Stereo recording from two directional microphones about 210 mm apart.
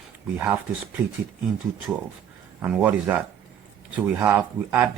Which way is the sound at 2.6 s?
5° right (ahead or behind).